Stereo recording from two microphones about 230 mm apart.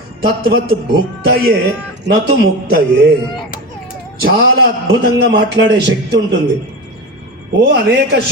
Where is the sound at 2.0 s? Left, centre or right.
Right.